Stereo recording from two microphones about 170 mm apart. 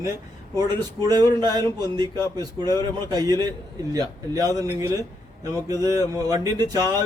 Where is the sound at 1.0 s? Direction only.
25° right (ahead or behind).